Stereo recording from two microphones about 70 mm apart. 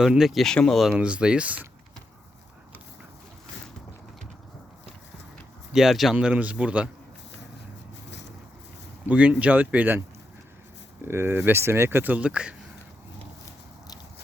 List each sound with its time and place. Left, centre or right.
0.0 s speech: centre
0.4 s speech: centre
0.9 s speech: centre
5.7 s speech: centre
6.1 s speech: centre
9.0 s speech: right
11.0 s speech: right; by 12.5 s centre